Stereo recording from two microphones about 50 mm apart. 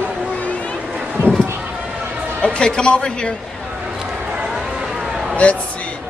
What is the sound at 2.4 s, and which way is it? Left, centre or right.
Speech, centre.